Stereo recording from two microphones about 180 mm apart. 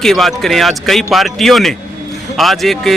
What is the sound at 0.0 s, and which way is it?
A man's voice, centre (ahead or behind).